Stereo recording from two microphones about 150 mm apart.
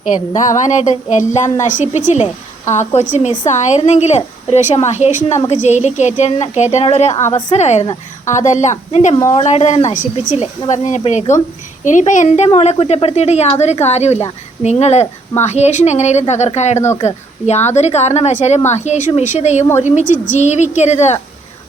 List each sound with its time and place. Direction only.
0.3 s a woman's voice: 55° left (ahead or behind)